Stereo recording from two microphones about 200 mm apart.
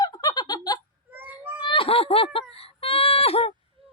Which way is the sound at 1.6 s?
25° left (ahead or behind).